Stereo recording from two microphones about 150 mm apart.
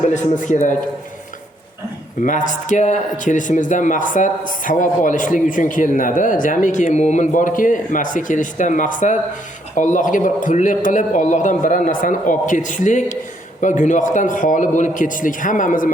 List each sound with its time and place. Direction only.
0.1 s speech: 55° left (ahead or behind)
2.2 s speech: 60° left (ahead or behind)